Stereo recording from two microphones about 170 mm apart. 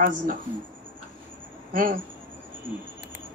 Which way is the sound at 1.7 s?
50° right (ahead or behind).